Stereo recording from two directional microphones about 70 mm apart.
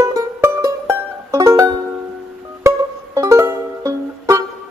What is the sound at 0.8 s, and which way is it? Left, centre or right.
Music, right.